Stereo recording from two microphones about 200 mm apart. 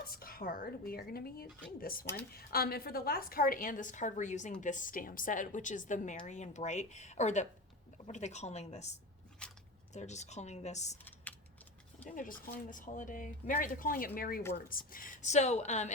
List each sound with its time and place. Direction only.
0.1 s a woman's voice: 45° left (ahead or behind)
12.0 s a woman's voice: 40° left (ahead or behind)